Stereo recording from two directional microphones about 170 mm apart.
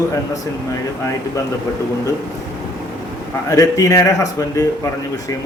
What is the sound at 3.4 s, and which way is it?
A man's voice, 20° left (ahead or behind).